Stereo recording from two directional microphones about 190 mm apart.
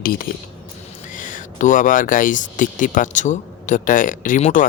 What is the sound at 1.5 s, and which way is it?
Speech, 45° left (ahead or behind).